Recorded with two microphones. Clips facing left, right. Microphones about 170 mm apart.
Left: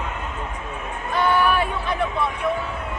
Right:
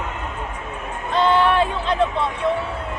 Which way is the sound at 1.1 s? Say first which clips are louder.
Right 3 dB; 25° right (ahead or behind).